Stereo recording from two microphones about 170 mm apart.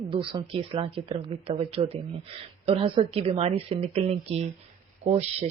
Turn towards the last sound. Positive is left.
turn(degrees=-40)  # may be behind; listen again after turning